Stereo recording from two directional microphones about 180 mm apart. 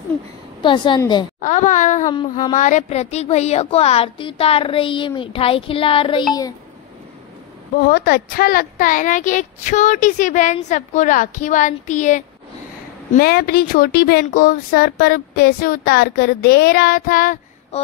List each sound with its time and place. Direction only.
0.6 s a woman's voice: 25° left (ahead or behind)
1.4 s speech: 45° left (ahead or behind)
2.0 s a woman's voice: 25° left (ahead or behind)
2.5 s speech: 45° left (ahead or behind)
7.7 s speech: 55° left (ahead or behind)
13.1 s speech: 55° left (ahead or behind)
17.7 s speech: 35° left (ahead or behind)